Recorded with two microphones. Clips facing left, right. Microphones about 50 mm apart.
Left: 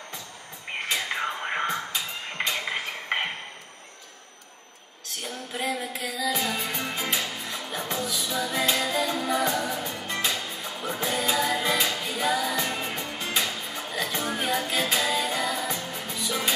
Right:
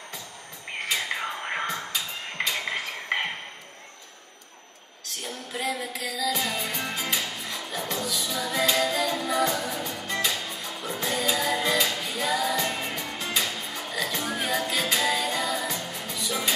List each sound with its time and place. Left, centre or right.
1.1 s music: centre
2.5 s mechanisms: centre
5.5 s music: centre
15.3 s music: centre
15.6 s music: centre